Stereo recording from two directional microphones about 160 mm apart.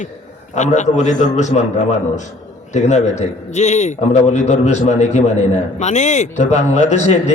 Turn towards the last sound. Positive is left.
turn(degrees=45)  # may be behind; listen again after turning